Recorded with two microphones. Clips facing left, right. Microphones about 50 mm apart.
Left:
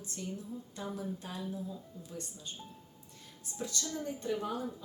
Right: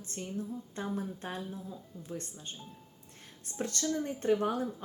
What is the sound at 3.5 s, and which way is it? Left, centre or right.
Speech, right.